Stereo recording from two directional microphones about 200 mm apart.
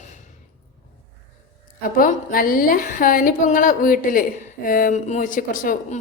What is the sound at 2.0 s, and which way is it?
A woman's voice, 45° left (ahead or behind).